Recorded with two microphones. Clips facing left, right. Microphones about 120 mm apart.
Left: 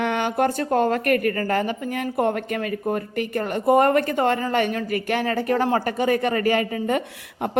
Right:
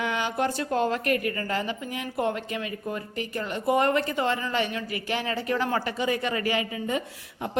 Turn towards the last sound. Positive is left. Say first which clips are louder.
# left 5 dB
turn(degrees=55)  # may be behind; listen again after turning